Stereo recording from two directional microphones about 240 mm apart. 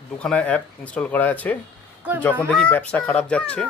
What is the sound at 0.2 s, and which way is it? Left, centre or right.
Speech, centre.